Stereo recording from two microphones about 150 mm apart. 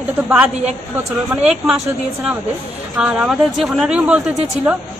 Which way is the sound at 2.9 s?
5° right (ahead or behind).